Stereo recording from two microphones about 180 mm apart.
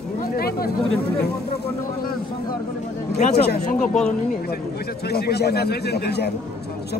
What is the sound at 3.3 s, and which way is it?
Speech, 60° left (ahead or behind).